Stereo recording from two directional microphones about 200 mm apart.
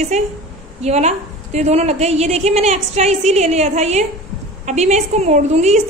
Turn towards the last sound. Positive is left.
turn(degrees=-35)  # may be behind; listen again after turning